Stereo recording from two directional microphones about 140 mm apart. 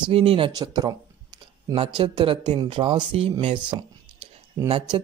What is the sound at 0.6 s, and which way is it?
Speech, 30° right (ahead or behind).